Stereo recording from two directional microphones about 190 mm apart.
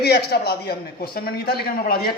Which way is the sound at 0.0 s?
55° left (ahead or behind).